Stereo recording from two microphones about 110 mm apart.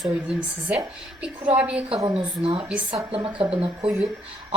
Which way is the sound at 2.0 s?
55° right (ahead or behind).